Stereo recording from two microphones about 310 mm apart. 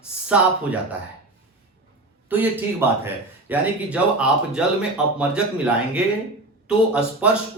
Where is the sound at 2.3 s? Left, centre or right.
Centre.